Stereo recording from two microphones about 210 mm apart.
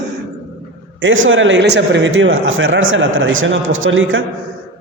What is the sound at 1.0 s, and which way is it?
A man's voice, 65° right (ahead or behind).